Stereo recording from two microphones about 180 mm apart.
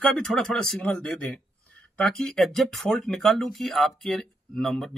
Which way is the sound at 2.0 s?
5° left (ahead or behind).